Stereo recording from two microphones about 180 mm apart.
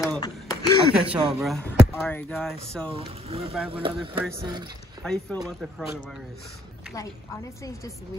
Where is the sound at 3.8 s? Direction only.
30° right (ahead or behind).